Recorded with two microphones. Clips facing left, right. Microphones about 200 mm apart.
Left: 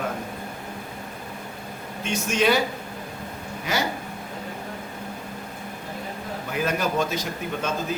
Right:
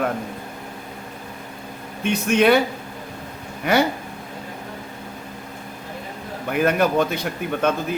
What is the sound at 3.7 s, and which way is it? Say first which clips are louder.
Speech: right 9 dB; 60° right (ahead or behind).